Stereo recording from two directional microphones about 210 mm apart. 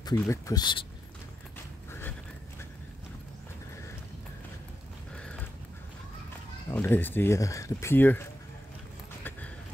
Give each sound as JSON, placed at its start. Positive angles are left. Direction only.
{"t": 0.0, "sound": "speech", "side_deg": 15}
{"t": 1.9, "sound": "a sound", "side_deg": 10}
{"t": 5.1, "sound": "horse", "side_deg": 5}
{"t": 6.7, "sound": "speech", "side_deg": 10}